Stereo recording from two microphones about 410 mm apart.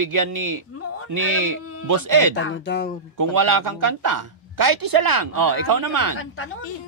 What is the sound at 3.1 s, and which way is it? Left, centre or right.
Speech, right.